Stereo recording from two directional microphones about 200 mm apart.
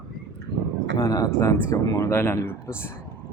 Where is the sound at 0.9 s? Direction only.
15° left (ahead or behind).